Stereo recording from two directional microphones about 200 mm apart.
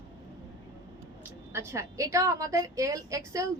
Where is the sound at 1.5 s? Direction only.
15° right (ahead or behind).